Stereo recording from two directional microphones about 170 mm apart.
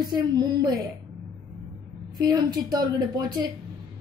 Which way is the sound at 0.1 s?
25° right (ahead or behind).